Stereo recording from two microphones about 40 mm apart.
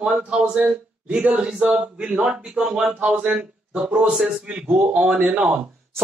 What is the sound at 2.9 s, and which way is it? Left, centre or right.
A man's voice, right.